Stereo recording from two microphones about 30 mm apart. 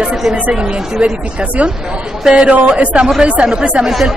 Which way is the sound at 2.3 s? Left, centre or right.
Right.